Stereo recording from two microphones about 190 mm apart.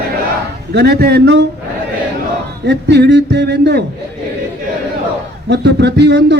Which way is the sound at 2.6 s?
65° right (ahead or behind).